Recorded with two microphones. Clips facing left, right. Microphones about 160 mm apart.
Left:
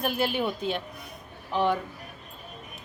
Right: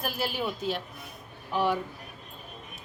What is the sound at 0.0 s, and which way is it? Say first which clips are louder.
Speech: left 5 dB; centre (ahead or behind).